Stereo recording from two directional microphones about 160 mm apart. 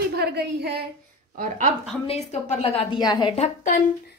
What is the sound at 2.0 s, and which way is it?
Speech, 45° left (ahead or behind).